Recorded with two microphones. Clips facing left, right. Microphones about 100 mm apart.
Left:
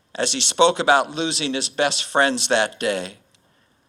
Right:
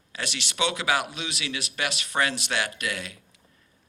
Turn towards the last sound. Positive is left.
turn(degrees=25)  # may be behind; listen again after turning